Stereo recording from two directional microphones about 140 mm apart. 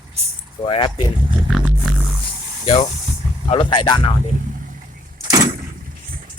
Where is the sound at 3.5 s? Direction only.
35° left (ahead or behind).